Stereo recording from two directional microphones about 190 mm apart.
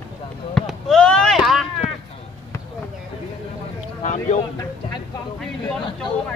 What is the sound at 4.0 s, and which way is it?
Speech, 40° left (ahead or behind).